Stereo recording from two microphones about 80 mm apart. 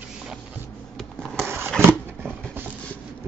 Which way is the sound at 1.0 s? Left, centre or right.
Centre.